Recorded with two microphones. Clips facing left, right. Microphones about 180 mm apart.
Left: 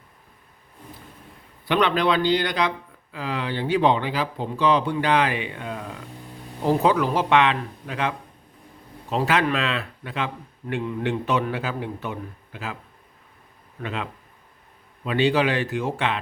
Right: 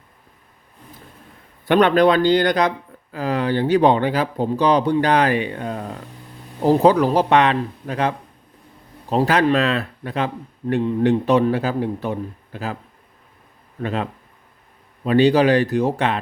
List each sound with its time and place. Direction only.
1.6 s speech: 50° right (ahead or behind)
13.8 s speech: 40° right (ahead or behind)